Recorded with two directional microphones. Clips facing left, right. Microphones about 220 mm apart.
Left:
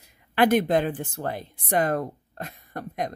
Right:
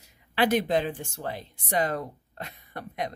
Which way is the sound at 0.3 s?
55° left (ahead or behind).